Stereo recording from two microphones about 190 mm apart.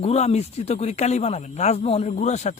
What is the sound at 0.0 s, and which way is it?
Speech, 35° left (ahead or behind).